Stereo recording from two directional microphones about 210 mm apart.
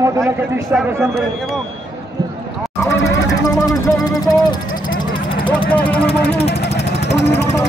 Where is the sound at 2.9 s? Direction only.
60° left (ahead or behind).